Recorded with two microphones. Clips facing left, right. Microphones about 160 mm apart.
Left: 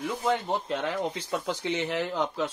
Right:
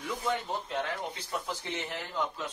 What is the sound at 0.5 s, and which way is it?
Speech, 85° left.